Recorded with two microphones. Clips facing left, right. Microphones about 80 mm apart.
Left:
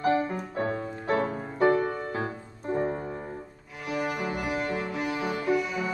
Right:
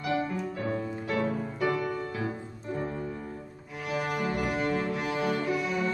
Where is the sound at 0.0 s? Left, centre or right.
Left.